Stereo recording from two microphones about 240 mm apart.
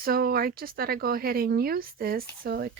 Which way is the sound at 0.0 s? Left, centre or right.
Right.